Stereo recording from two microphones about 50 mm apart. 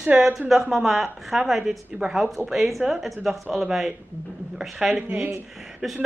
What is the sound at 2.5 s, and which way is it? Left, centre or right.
A woman's voice, centre.